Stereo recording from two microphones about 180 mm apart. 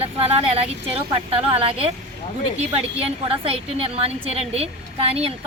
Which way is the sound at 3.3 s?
30° right (ahead or behind).